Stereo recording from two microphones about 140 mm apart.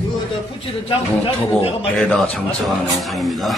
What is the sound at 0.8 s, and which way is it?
Speech, 40° left (ahead or behind).